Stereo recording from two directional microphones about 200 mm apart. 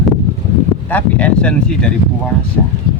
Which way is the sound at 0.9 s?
5° left (ahead or behind).